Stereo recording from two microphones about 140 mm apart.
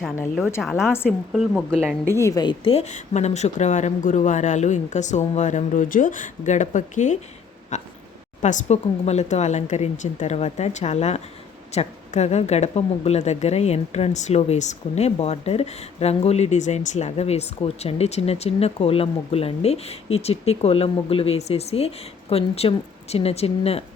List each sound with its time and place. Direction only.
0.9 s a woman's voice: 15° left (ahead or behind)
1.3 s speech: centre (ahead or behind)
2.1 s speech: 25° left (ahead or behind); by 7.2 s 60° left (ahead or behind)
7.7 s a sound: 60° left (ahead or behind)
8.4 s speech: 60° left (ahead or behind)